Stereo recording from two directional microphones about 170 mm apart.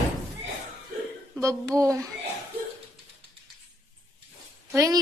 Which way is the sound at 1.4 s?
20° right (ahead or behind).